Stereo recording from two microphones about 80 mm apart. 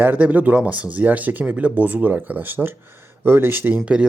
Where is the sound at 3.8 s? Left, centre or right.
Centre.